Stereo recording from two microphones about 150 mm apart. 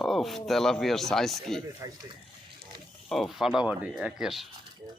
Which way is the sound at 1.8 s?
20° right (ahead or behind).